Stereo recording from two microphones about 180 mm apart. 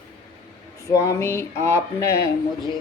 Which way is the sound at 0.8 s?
15° left (ahead or behind).